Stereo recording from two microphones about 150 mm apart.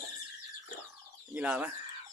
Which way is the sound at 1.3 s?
10° right (ahead or behind).